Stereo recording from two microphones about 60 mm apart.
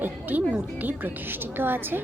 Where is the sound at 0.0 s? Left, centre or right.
Right.